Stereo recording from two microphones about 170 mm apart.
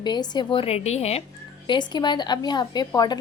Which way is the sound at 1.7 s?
25° left (ahead or behind).